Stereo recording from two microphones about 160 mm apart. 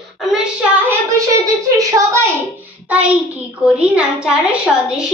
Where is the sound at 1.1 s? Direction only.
20° right (ahead or behind).